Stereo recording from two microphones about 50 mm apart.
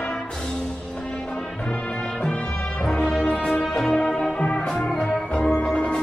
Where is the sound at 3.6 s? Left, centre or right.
Centre.